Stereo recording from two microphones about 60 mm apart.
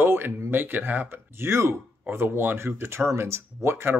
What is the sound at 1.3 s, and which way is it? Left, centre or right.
Speech, right.